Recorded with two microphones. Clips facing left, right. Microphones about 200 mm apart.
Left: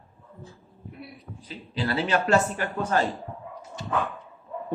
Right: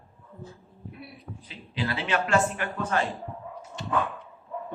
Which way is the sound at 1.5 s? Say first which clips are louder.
Left 3 dB; 40° left (ahead or behind).